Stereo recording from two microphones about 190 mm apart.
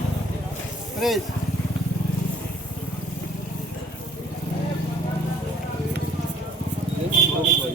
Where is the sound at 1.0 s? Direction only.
Centre (ahead or behind).